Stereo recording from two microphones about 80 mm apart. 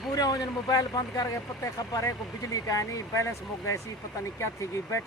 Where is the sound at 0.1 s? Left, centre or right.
Left.